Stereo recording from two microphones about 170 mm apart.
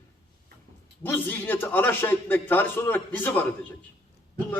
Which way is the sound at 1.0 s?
10° left (ahead or behind).